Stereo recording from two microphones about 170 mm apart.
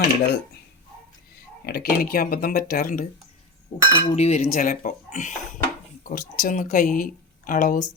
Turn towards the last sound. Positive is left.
turn(degrees=50)  # may be behind; listen again after turning